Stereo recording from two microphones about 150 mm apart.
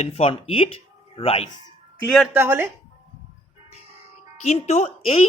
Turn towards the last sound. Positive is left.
turn(degrees=40)  # may be behind; listen again after turning